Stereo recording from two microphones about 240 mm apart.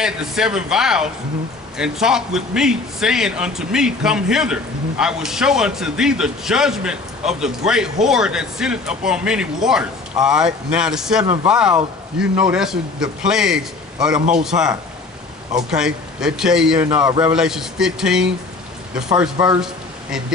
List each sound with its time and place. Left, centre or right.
0.0 s a man's voice: centre
19.3 s speech: centre